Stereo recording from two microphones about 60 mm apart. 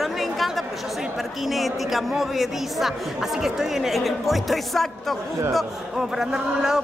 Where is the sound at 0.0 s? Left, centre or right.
Centre.